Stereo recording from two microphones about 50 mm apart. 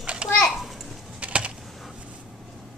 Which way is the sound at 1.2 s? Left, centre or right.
Right.